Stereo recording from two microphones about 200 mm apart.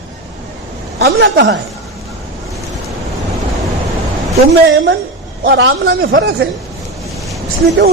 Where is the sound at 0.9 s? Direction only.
55° right (ahead or behind).